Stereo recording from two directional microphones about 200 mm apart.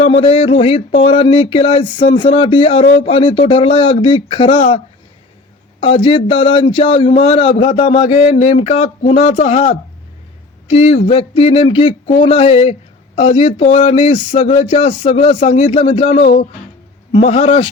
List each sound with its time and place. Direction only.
0.0 s speech: 25° left (ahead or behind)
5.8 s speech: 25° left (ahead or behind)